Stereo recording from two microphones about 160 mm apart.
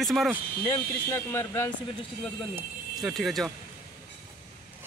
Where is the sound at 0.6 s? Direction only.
15° left (ahead or behind).